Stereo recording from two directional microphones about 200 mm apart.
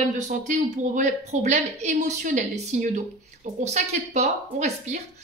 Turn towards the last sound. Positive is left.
turn(degrees=-35)  # may be behind; listen again after turning